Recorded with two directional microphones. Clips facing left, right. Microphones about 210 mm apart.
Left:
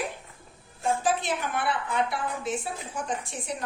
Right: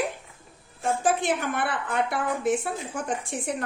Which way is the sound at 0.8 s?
50° right (ahead or behind).